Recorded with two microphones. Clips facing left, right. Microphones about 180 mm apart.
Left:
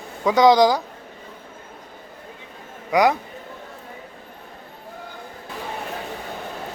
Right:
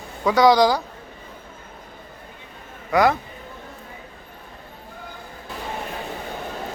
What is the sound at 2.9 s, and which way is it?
Speech, 15° left (ahead or behind).